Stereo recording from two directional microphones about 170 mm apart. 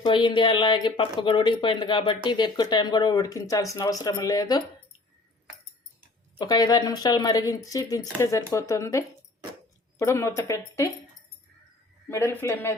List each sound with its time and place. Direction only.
0.1 s speech: 30° left (ahead or behind)
6.4 s speech: 25° left (ahead or behind)
12.0 s speech: 15° left (ahead or behind)